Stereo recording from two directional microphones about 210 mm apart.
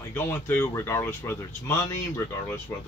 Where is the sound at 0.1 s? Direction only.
10° left (ahead or behind).